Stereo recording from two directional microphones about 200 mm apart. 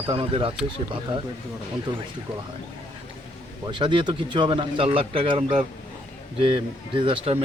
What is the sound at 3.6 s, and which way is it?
Speech, 25° right (ahead or behind).